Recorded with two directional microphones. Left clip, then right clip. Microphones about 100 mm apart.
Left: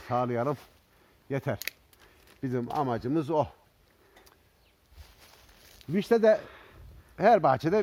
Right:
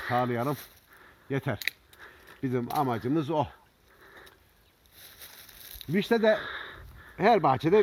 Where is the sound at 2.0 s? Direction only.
5° right (ahead or behind).